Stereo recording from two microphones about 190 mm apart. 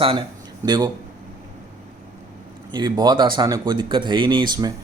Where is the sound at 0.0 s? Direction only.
25° right (ahead or behind).